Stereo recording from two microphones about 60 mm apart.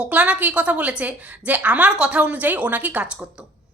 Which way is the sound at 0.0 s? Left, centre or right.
Right.